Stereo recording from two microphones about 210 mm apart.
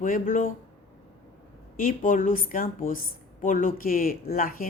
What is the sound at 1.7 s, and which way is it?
A woman's voice, 40° left (ahead or behind).